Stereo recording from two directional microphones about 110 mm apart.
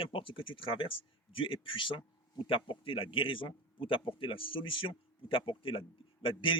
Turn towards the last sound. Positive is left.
turn(degrees=55)  # may be behind; listen again after turning